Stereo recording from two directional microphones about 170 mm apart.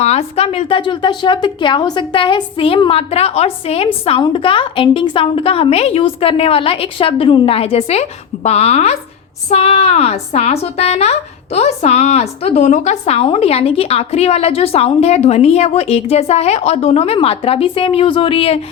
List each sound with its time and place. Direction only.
0.0 s a woman's voice: 40° left (ahead or behind)